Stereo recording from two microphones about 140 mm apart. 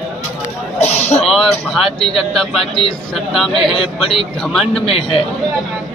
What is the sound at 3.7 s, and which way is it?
Speech, 40° left (ahead or behind).